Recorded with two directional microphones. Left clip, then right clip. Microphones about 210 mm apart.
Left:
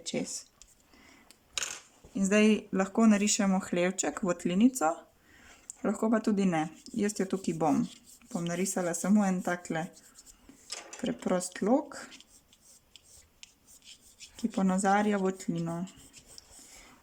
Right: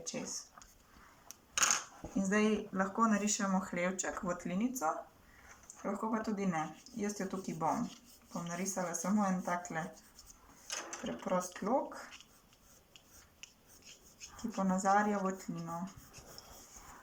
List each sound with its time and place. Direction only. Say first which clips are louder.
0.1 s speech: left 10 dB; 45° left (ahead or behind)
2.1 s speech: left 7 dB; 50° left (ahead or behind)
11.0 s speech: left 5 dB; 50° left (ahead or behind)
14.5 s speech: left 3 dB; 50° left (ahead or behind)